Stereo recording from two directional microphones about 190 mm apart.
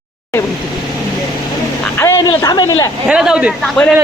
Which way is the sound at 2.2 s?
20° left (ahead or behind).